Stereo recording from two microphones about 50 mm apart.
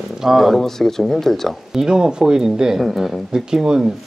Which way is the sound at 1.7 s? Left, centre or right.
Centre.